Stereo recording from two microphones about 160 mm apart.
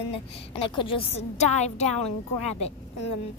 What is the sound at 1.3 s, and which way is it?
A woman's voice, 45° left (ahead or behind).